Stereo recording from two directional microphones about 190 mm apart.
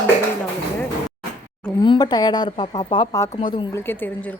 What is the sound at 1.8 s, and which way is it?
A woman's voice, 20° left (ahead or behind).